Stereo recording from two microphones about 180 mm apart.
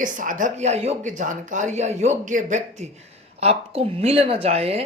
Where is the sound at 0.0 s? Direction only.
45° right (ahead or behind).